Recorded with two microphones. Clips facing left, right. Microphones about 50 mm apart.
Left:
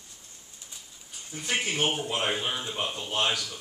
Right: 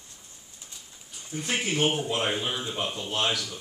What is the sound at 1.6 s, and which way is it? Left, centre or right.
Speech, centre.